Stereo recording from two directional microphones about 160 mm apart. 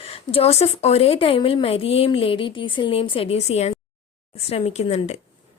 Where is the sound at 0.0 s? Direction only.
35° left (ahead or behind).